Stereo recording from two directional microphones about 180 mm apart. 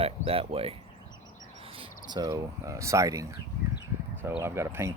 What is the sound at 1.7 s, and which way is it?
Speech, 20° right (ahead or behind).